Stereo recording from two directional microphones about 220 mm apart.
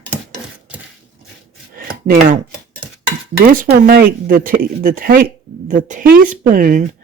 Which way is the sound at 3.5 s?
40° right (ahead or behind).